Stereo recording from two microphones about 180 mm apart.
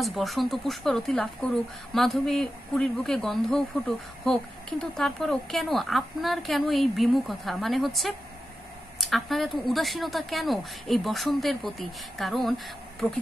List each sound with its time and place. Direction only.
0.0 s speech: centre (ahead or behind)